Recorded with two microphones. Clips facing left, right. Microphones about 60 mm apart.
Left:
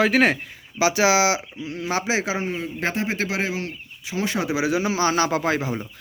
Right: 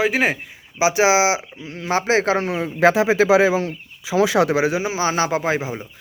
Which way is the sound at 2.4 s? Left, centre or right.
Right.